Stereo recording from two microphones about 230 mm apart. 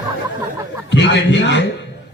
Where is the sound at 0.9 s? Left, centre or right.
Left.